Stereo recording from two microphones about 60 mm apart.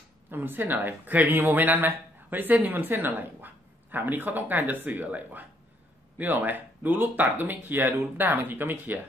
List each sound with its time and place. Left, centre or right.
0.3 s speech: right